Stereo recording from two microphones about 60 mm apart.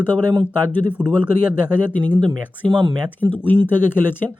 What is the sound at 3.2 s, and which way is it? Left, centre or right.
Speech, right.